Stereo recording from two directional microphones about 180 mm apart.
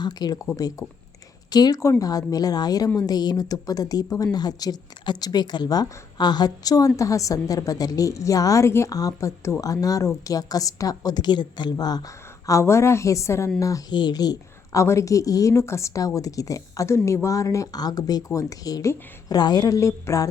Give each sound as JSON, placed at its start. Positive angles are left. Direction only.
{"t": 0.0, "sound": "a woman's voice", "side_deg": 20}